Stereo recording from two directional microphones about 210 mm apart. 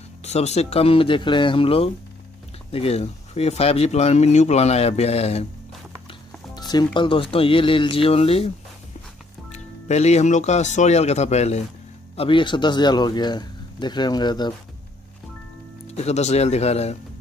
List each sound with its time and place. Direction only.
0.2 s speech: 30° left (ahead or behind)
6.5 s speech: 20° left (ahead or behind)
9.5 s speech: 30° left (ahead or behind)
15.9 s speech: 30° left (ahead or behind)